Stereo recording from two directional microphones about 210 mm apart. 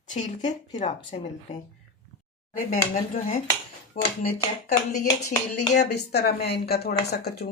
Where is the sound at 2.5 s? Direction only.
40° left (ahead or behind).